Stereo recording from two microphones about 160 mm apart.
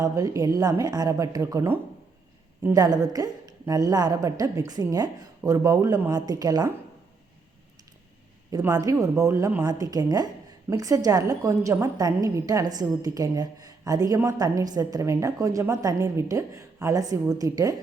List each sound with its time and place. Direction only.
0.0 s a woman's voice: 20° right (ahead or behind)
8.5 s a woman's voice: 20° right (ahead or behind)